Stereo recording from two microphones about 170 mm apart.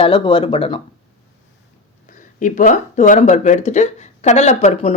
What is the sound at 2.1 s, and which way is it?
Speech, 50° left (ahead or behind).